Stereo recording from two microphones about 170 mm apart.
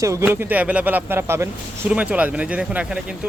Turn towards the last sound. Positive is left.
turn(degrees=-5)  # may be behind; listen again after turning